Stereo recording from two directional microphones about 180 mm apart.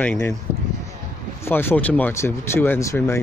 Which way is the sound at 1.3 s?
10° left (ahead or behind).